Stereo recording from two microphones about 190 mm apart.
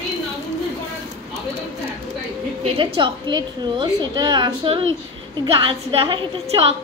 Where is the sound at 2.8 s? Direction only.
25° right (ahead or behind).